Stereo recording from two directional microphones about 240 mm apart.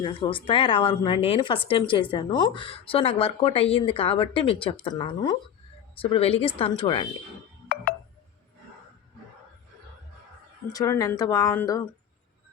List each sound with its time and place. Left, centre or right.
0.0 s speech: left
10.7 s speech: centre